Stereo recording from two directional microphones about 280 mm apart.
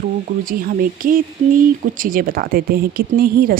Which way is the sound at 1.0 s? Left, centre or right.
Right.